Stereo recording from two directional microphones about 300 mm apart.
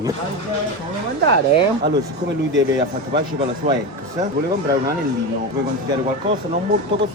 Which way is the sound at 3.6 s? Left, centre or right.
Right.